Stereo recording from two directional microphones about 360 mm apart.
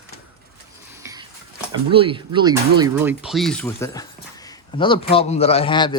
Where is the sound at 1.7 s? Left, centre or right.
Centre.